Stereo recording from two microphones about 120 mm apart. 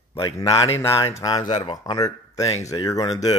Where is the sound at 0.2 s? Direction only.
30° left (ahead or behind).